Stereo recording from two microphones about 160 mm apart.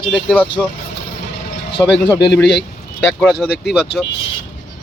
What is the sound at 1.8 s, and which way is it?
Speech, 15° left (ahead or behind).